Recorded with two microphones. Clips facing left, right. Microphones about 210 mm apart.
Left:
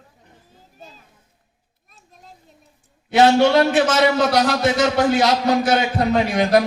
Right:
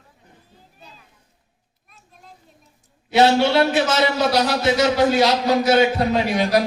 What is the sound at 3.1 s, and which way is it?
A man's voice, 45° left (ahead or behind).